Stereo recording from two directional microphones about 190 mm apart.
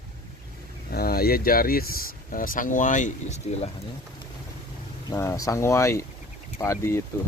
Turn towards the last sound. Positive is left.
turn(degrees=15)  # may be behind; listen again after turning